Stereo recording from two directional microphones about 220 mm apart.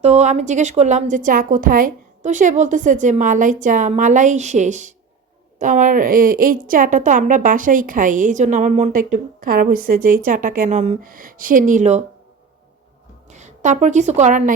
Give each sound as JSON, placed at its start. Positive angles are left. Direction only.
{"t": 0.0, "sound": "a woman's voice", "side_deg": -30}
{"t": 13.3, "sound": "a woman's voice", "side_deg": -35}